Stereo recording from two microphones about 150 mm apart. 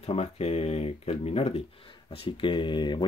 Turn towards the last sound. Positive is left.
turn(degrees=30)  # may be behind; listen again after turning